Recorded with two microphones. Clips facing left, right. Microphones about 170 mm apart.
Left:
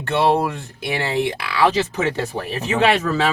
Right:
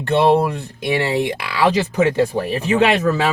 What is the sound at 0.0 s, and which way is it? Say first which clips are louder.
Speech: right 3 dB; 15° right (ahead or behind).